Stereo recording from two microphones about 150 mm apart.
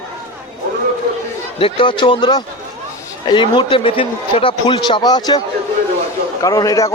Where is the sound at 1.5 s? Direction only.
35° left (ahead or behind).